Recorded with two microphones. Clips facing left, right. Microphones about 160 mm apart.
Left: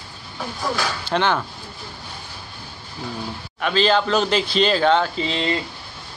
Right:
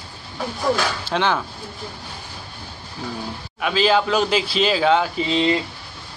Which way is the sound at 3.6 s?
5° right (ahead or behind).